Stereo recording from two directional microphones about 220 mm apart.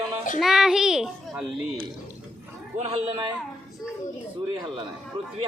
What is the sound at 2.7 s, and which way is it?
Speech, 30° right (ahead or behind).